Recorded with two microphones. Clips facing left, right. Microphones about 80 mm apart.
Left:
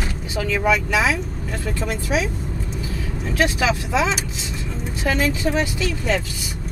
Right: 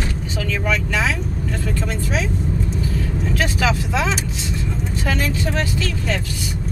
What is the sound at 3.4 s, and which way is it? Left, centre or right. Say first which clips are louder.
Speech: left 2 dB; centre.